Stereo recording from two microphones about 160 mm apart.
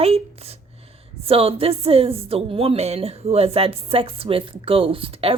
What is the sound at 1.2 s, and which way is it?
A woman's voice, 35° right (ahead or behind).